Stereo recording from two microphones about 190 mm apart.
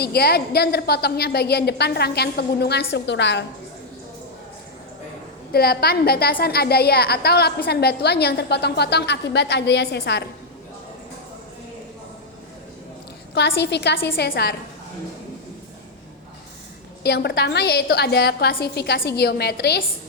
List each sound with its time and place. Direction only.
0.0 s a woman's voice: 55° left (ahead or behind)
5.5 s a woman's voice: 55° left (ahead or behind)
13.6 s a woman's voice: 60° left (ahead or behind)
17.0 s a woman's voice: 60° left (ahead or behind)